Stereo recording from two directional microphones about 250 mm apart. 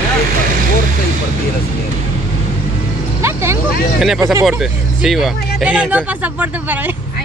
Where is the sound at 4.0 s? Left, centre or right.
Centre.